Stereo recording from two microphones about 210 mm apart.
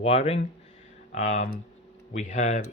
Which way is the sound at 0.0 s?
25° left (ahead or behind).